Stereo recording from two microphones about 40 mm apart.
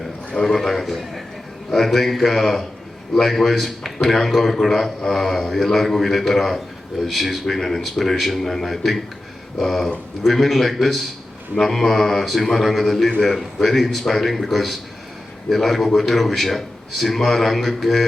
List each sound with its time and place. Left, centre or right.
0.3 s a man's voice: centre